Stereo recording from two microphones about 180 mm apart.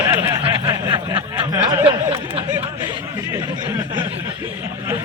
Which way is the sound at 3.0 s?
15° right (ahead or behind).